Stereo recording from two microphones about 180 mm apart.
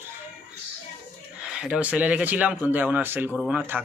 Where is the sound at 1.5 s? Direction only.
5° right (ahead or behind).